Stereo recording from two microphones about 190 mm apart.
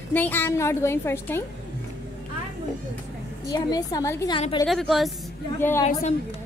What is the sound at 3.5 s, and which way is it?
Speech, 20° left (ahead or behind).